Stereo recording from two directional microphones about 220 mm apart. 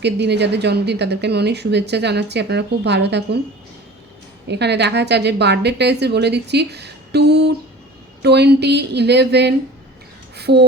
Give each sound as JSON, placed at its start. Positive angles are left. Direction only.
{"t": 0.0, "sound": "a woman's voice", "side_deg": -50}
{"t": 4.4, "sound": "a woman's voice", "side_deg": -50}
{"t": 10.3, "sound": "a sound", "side_deg": -50}